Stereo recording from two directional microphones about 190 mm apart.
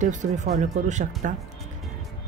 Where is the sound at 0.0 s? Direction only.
40° right (ahead or behind).